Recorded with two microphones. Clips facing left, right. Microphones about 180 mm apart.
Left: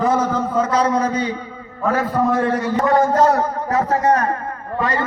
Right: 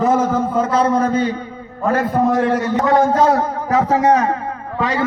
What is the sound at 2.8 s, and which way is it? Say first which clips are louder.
A man's voice: even; 90° right.